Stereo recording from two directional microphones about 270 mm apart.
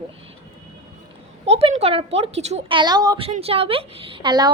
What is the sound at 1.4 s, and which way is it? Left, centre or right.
A woman's voice, right.